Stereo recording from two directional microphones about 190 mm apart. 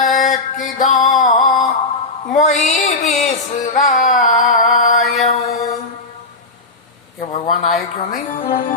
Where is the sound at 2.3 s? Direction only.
35° left (ahead or behind).